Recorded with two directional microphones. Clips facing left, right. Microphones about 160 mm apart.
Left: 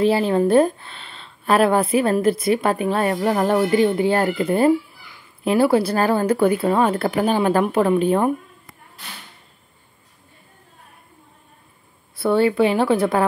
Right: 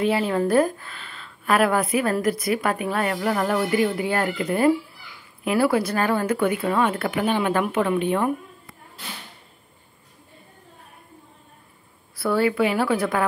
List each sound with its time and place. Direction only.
0.0 s a woman's voice: 30° left (ahead or behind)
12.2 s a woman's voice: 25° left (ahead or behind)